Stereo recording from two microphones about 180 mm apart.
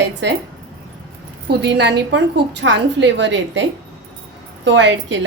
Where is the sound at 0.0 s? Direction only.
75° right (ahead or behind).